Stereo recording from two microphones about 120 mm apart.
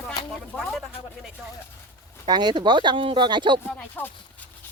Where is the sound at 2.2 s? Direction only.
35° right (ahead or behind).